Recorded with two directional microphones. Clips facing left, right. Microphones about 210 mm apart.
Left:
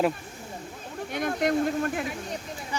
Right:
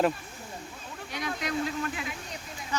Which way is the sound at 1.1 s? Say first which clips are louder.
Left 7 dB; 50° left (ahead or behind).